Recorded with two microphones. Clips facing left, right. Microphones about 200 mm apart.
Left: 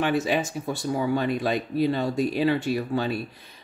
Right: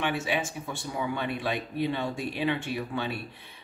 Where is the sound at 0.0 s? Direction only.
40° left (ahead or behind).